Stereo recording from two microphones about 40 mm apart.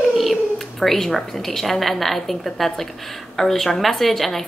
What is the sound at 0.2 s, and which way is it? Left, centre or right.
A woman's voice, centre.